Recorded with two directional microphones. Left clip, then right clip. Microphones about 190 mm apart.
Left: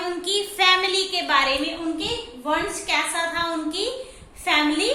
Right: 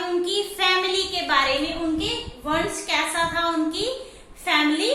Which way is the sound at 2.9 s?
25° left (ahead or behind).